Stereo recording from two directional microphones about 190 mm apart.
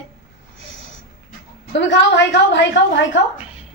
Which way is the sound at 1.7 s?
65° left (ahead or behind).